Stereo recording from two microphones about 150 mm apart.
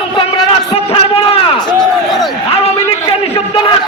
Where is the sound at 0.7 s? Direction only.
40° left (ahead or behind).